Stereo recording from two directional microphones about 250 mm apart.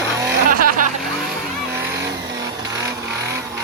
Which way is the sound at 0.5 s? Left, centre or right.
Right.